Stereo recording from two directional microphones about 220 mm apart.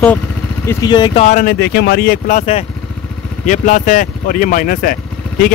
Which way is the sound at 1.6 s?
50° left (ahead or behind).